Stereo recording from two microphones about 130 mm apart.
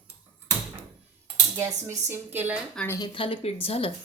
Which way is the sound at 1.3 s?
20° right (ahead or behind).